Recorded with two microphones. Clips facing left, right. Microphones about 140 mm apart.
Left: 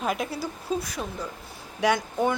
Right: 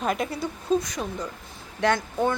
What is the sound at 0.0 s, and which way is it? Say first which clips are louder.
A woman's voice: right 2 dB; centre (ahead or behind).